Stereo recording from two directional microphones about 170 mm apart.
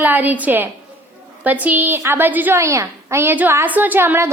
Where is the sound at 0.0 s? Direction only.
10° right (ahead or behind).